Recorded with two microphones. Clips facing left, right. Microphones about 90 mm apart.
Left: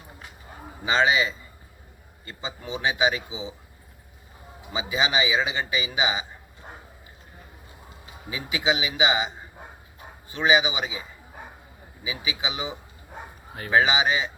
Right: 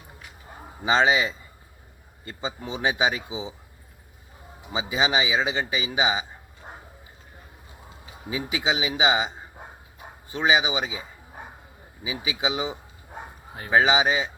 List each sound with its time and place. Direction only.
0.9 s speech: 25° right (ahead or behind)
4.7 s speech: 30° right (ahead or behind)
6.6 s a sound: 25° right (ahead or behind)
8.3 s speech: 30° right (ahead or behind)
10.3 s speech: 30° right (ahead or behind)
12.1 s speech: 35° right (ahead or behind)